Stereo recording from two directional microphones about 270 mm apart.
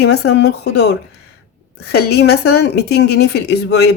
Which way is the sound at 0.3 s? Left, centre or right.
Left.